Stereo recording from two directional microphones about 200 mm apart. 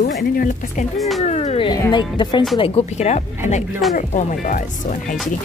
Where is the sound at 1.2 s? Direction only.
35° left (ahead or behind).